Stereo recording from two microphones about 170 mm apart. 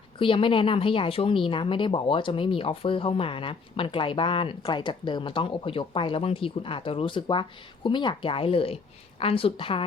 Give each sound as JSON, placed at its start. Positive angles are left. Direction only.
{"t": 0.2, "sound": "speech", "side_deg": 30}